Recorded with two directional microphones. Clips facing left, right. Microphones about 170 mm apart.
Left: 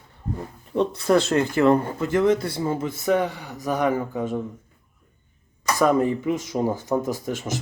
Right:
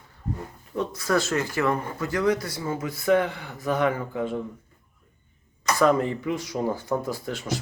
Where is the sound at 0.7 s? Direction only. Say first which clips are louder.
Left 5 dB; 25° left (ahead or behind).